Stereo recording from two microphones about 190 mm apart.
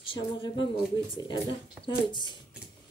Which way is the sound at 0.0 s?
25° left (ahead or behind).